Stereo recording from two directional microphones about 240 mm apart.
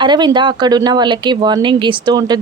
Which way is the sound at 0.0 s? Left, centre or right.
Centre.